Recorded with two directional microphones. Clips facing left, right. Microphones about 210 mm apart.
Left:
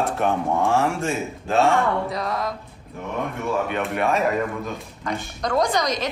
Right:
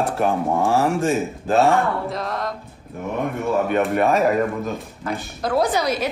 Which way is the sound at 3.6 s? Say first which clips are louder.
Right 6 dB; 45° right (ahead or behind).